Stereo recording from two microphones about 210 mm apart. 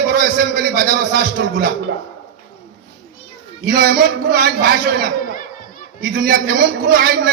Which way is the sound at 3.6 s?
45° right (ahead or behind).